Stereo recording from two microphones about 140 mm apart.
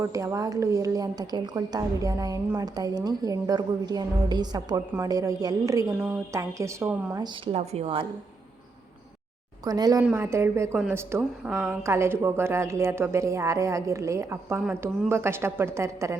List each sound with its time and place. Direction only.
0.0 s a woman's voice: 20° right (ahead or behind)
7.5 s a woman's voice: 50° right (ahead or behind)
9.6 s a woman's voice: 25° right (ahead or behind)
10.0 s a woman's voice: 15° right (ahead or behind)